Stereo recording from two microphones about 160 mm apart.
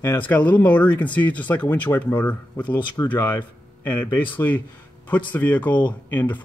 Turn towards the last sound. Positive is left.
turn(degrees=10)  # may be behind; listen again after turning